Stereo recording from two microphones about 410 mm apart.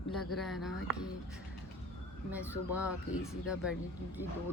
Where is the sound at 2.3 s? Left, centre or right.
Centre.